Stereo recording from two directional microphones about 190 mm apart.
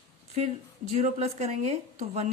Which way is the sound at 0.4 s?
35° right (ahead or behind).